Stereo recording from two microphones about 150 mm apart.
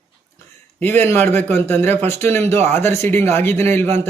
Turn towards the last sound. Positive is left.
turn(degrees=15)  # may be behind; listen again after turning